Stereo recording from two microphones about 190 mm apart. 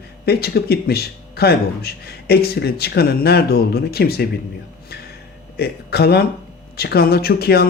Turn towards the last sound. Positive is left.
turn(degrees=55)  # may be behind; listen again after turning